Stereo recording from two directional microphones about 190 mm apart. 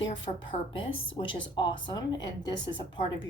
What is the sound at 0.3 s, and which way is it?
A woman's voice, 35° left (ahead or behind).